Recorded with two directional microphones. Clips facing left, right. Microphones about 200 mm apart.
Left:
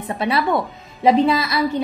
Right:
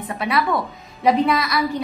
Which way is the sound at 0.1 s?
30° left (ahead or behind).